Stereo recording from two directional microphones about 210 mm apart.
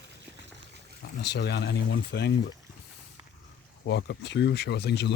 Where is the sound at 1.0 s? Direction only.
55° left (ahead or behind).